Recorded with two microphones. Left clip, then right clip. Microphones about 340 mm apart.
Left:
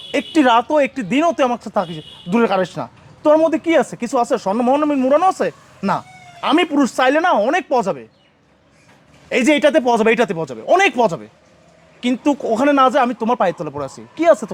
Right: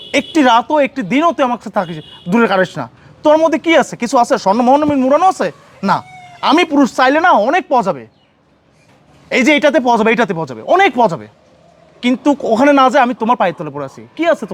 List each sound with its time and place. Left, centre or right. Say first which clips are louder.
0.1 s a woman's voice: right 3 dB; right
1.6 s a woman's voice: right 2 dB; right
5.9 s speech: right 5 dB; right
6.7 s a woman's voice: right 4 dB; right
9.4 s a woman's voice: right 3 dB; right
13.1 s a woman's voice: right 3 dB; right